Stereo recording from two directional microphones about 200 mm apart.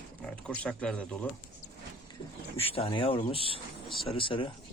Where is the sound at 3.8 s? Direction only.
Centre (ahead or behind).